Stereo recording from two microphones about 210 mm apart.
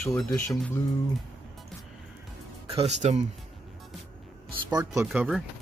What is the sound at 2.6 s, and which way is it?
Speech, 30° right (ahead or behind).